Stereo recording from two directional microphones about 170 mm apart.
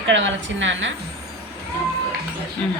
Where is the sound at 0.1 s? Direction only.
90° right.